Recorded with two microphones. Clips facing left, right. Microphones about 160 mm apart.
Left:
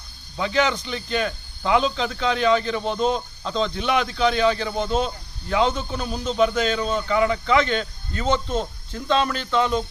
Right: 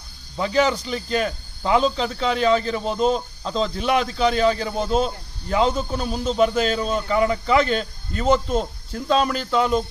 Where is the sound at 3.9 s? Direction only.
35° right (ahead or behind).